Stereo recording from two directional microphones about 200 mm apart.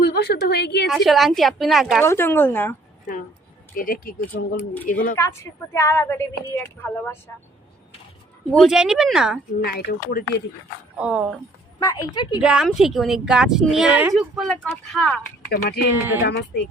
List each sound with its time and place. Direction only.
0.0 s a woman's voice: 50° left (ahead or behind)
0.9 s speech: centre (ahead or behind)
2.0 s speech: 10° left (ahead or behind)
3.8 s speech: 45° left (ahead or behind)
5.1 s speech: 15° left (ahead or behind)
8.5 s speech: centre (ahead or behind)
9.6 s speech: 50° left (ahead or behind)
10.9 s speech: 5° right (ahead or behind)
11.8 s a woman's voice: 20° left (ahead or behind)
12.4 s speech: 5° right (ahead or behind)
15.4 s speech: 55° left (ahead or behind)